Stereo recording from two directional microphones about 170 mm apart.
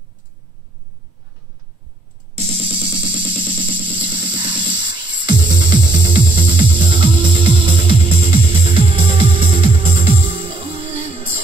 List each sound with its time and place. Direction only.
2.3 s music: 35° right (ahead or behind)